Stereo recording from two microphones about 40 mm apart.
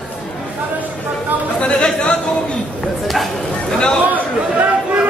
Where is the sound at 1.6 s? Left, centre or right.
Left.